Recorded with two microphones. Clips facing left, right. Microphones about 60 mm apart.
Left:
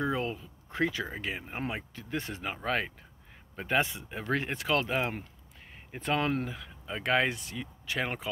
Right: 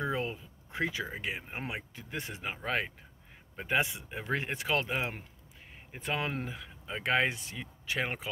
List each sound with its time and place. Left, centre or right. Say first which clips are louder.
0.0 s a sound: left 2 dB; right
1.1 s speech: left 1 dB; centre
4.9 s speech: left 3 dB; centre; by 8.3 s right